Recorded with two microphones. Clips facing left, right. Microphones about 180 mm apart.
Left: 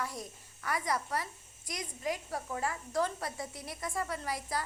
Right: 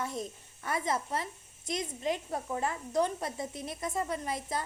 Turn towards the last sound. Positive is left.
turn(degrees=-20)  # may be behind; listen again after turning